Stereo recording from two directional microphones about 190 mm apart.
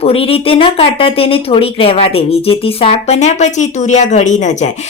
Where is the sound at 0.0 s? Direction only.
30° left (ahead or behind).